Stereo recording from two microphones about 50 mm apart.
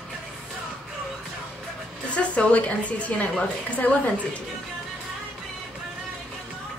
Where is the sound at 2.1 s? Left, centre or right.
Left.